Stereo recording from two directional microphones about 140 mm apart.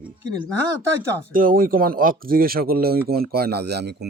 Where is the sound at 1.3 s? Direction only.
80° right.